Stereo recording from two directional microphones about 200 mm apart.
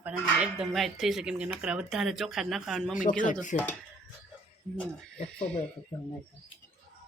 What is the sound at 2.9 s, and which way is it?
Speech, 40° left (ahead or behind).